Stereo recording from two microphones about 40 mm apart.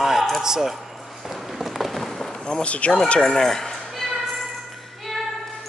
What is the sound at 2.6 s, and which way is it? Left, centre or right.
Speech, left.